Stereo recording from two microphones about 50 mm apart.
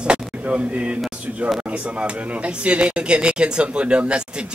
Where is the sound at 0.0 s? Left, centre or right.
Right.